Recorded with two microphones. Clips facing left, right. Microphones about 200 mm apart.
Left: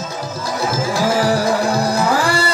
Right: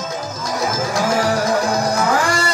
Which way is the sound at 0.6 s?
30° left (ahead or behind).